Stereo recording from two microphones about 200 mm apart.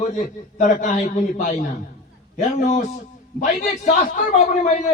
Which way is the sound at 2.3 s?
40° left (ahead or behind).